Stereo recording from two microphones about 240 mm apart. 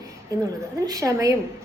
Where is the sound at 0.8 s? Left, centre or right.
Centre.